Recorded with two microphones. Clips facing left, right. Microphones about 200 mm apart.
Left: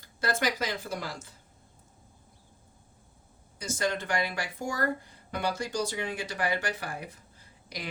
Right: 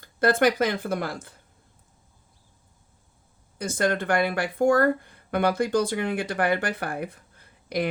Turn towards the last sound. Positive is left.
turn(degrees=-60)  # may be behind; listen again after turning